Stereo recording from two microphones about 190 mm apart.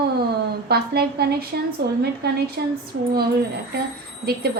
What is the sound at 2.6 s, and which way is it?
Speech, 55° right (ahead or behind).